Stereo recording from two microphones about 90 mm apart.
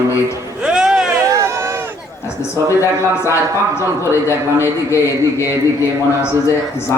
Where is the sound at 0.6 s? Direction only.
5° right (ahead or behind).